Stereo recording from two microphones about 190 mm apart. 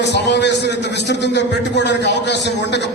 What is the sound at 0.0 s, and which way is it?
A man's voice, 65° left (ahead or behind).